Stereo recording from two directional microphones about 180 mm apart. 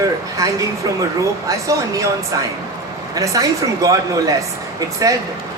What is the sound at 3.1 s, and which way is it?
Speech, 20° right (ahead or behind).